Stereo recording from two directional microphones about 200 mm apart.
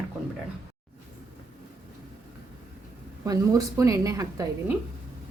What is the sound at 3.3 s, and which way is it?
A woman's voice, 15° right (ahead or behind).